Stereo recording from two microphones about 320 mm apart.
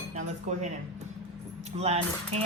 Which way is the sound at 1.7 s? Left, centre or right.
Centre.